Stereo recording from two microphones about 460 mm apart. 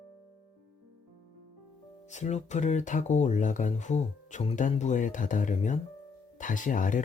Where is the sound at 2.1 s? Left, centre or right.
Centre.